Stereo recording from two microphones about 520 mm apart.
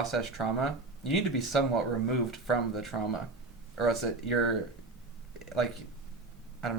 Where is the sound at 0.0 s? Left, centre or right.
Left.